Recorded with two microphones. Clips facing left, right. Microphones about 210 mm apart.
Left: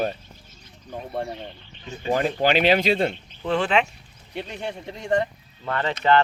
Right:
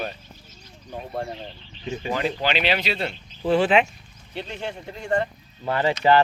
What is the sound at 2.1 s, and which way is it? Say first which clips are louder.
Speech: left 5 dB; 45° left (ahead or behind).